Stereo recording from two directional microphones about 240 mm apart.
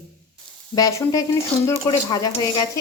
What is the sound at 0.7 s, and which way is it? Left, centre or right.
Sizzle, centre.